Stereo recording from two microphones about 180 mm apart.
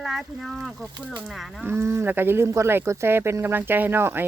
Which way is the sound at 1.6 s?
10° right (ahead or behind).